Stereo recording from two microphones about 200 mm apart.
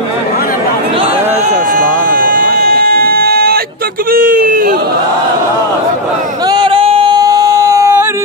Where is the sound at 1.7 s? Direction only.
45° right (ahead or behind).